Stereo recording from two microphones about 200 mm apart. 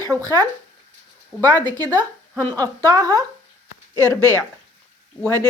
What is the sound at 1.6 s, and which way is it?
A woman's voice, 20° right (ahead or behind).